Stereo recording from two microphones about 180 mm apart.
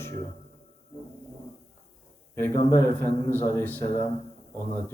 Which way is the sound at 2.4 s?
15° left (ahead or behind).